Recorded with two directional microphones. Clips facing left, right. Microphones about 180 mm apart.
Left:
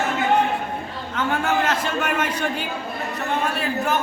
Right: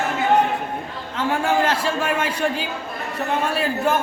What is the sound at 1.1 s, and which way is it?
A man's voice, 30° right (ahead or behind).